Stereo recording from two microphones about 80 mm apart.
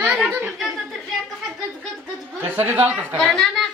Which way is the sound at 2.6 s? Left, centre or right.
Right.